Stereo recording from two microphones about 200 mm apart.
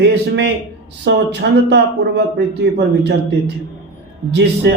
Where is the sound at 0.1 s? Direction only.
60° right (ahead or behind).